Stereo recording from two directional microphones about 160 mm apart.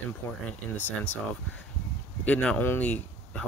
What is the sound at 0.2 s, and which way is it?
Speech, 15° left (ahead or behind).